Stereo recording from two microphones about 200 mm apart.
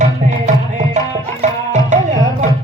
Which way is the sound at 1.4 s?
35° right (ahead or behind).